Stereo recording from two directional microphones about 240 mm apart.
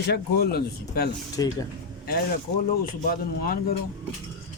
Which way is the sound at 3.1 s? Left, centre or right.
Left.